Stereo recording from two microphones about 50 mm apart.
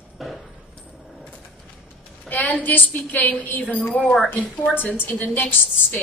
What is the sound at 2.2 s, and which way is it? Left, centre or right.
A woman's voice, left.